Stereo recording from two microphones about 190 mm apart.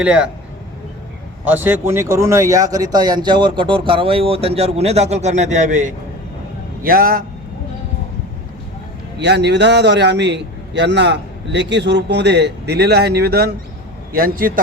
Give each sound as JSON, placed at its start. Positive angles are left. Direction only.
{"t": 0.0, "sound": "speech", "side_deg": -5}
{"t": 1.5, "sound": "a man's voice", "side_deg": -10}
{"t": 9.1, "sound": "a man's voice", "side_deg": -60}